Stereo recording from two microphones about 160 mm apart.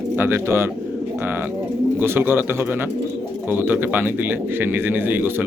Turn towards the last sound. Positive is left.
turn(degrees=-15)  # may be behind; listen again after turning